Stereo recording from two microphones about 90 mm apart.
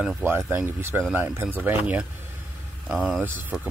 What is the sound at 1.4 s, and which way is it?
Speech, 5° right (ahead or behind).